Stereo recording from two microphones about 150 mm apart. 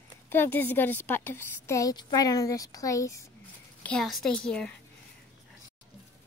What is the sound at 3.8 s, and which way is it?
A woman's voice, 5° left (ahead or behind).